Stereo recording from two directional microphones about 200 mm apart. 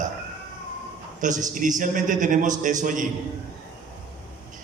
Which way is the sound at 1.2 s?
40° right (ahead or behind).